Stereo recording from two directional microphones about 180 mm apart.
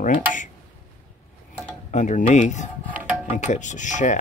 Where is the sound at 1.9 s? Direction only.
40° left (ahead or behind).